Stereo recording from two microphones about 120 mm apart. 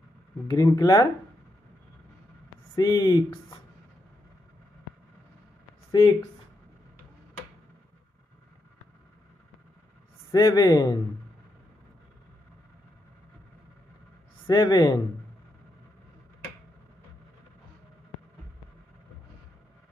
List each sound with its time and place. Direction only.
0.5 s speech: 35° left (ahead or behind)
2.7 s speech: 30° left (ahead or behind)
5.9 s a sound: 35° left (ahead or behind)
10.3 s speech: 30° left (ahead or behind)
14.4 s speech: 35° left (ahead or behind)